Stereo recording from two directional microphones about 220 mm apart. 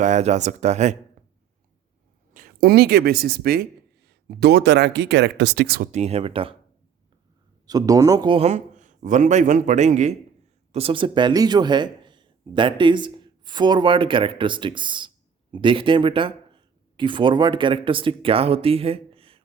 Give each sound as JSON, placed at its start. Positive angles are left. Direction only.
{"t": 0.0, "sound": "a man's voice", "side_deg": -30}
{"t": 2.3, "sound": "speech", "side_deg": -40}
{"t": 7.7, "sound": "a man's voice", "side_deg": -15}